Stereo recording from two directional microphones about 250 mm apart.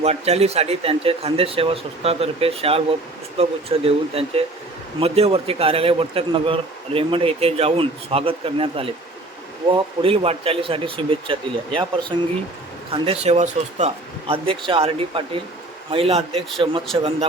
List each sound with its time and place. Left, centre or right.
0.0 s a man's voice: right